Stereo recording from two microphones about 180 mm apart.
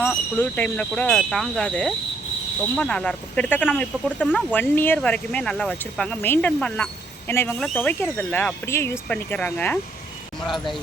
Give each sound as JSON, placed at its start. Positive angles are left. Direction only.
{"t": 0.3, "sound": "speech", "side_deg": 5}